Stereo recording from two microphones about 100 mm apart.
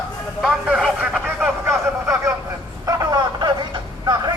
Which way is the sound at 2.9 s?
40° right (ahead or behind).